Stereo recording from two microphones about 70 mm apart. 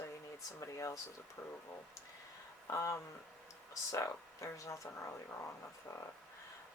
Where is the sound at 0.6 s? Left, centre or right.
Left.